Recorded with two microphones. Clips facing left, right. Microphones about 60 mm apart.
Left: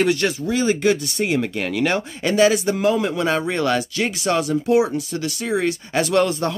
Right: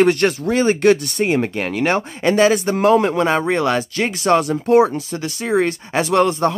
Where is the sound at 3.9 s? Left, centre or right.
Right.